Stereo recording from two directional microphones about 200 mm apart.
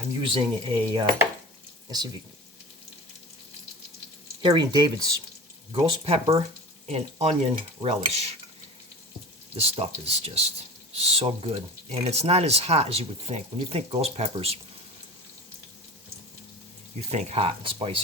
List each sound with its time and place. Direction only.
0.2 s speech: 25° right (ahead or behind)
4.4 s speech: 20° right (ahead or behind)
9.6 s speech: 30° right (ahead or behind)
17.0 s speech: 35° right (ahead or behind)